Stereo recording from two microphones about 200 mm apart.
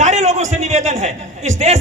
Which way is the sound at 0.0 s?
35° right (ahead or behind).